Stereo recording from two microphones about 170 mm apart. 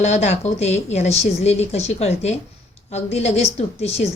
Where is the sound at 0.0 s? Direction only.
40° left (ahead or behind).